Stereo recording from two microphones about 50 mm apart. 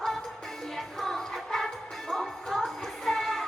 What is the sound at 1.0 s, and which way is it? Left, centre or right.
Music, centre.